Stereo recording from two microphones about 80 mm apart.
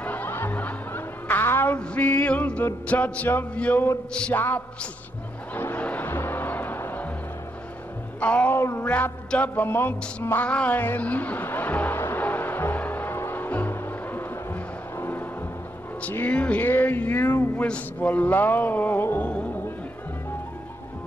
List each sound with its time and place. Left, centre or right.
0.0 s music: left
3.5 s a man's voice: centre
4.4 s music: left
8.2 s music: centre
8.5 s a sound: left
8.8 s music: left